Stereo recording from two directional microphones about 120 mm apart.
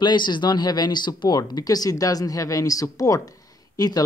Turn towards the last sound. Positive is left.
turn(degrees=30)  # may be behind; listen again after turning